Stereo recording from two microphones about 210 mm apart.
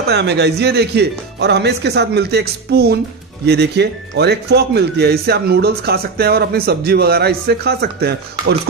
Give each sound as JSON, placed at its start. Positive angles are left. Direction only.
{"t": 0.1, "sound": "speech", "side_deg": -55}